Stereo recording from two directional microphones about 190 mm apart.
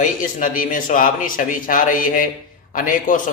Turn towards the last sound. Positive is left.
turn(degrees=45)  # may be behind; listen again after turning